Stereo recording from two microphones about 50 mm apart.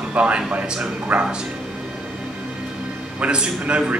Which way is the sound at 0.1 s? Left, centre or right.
Right.